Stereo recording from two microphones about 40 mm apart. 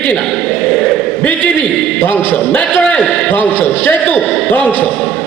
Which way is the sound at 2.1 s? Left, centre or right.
Left.